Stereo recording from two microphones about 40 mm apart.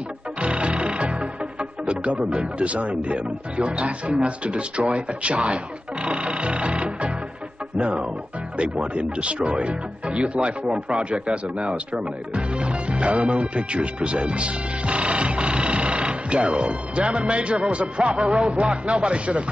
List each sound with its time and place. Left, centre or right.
0.4 s speech: right